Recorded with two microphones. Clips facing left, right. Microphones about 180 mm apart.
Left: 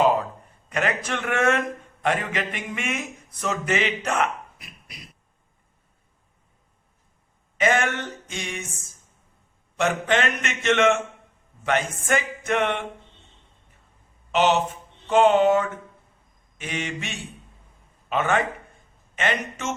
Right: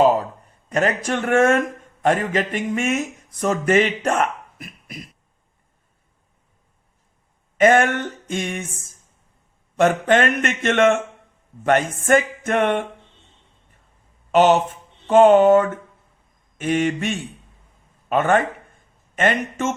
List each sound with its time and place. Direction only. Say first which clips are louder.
0.7 s a man's voice: right 5 dB; 40° right (ahead or behind)
7.6 s a man's voice: right 7 dB; 50° right (ahead or behind)
9.7 s a man's voice: right 6 dB; 50° right (ahead or behind)
14.3 s a man's voice: right 5 dB; 45° right (ahead or behind)